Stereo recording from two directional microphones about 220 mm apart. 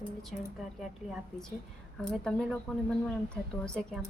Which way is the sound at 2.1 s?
5° left (ahead or behind).